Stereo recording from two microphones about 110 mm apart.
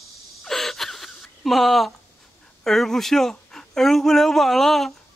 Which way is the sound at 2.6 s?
5° left (ahead or behind).